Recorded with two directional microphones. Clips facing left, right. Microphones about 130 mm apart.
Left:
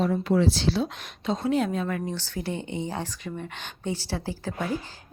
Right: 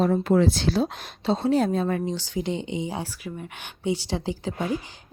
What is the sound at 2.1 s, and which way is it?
A woman's voice, 15° right (ahead or behind).